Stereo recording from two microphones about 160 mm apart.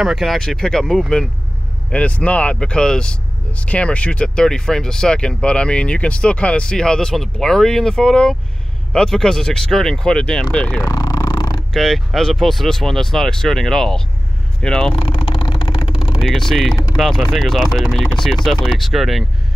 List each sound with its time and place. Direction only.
0.0 s speech: centre (ahead or behind)
10.8 s purr: 25° left (ahead or behind)
11.7 s speech: centre (ahead or behind)
15.0 s vehicle: 35° left (ahead or behind)
16.2 s speech: centre (ahead or behind)